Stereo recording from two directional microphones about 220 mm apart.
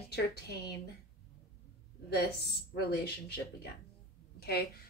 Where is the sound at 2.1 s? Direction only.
45° left (ahead or behind).